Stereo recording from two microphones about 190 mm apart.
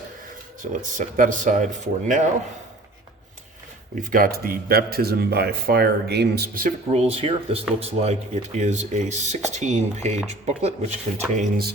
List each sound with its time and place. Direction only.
0.6 s speech: 45° right (ahead or behind)
3.9 s speech: 45° right (ahead or behind)
7.1 s speech: 30° right (ahead or behind)
11.3 s speech: 50° right (ahead or behind)